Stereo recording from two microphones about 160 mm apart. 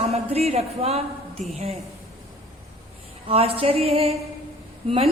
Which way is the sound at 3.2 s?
35° right (ahead or behind).